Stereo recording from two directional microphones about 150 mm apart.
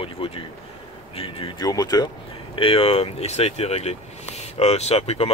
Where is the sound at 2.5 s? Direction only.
40° left (ahead or behind).